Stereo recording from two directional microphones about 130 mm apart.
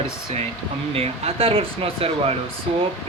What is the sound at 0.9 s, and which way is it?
Speech, 50° right (ahead or behind).